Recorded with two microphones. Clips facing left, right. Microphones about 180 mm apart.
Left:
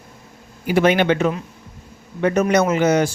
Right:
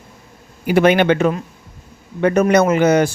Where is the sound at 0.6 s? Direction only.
60° right (ahead or behind).